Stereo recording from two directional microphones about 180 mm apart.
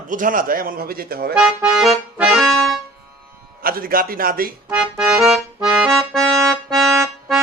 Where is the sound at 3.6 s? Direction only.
55° right (ahead or behind).